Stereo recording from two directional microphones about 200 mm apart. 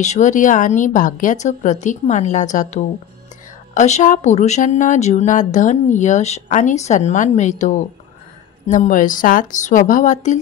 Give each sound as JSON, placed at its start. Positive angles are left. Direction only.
{"t": 0.0, "sound": "speech", "side_deg": 35}